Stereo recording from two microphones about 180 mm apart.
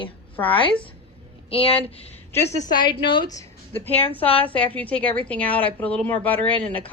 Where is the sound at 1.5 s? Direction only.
30° left (ahead or behind).